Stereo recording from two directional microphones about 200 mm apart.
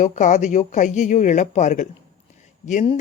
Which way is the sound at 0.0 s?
40° left (ahead or behind).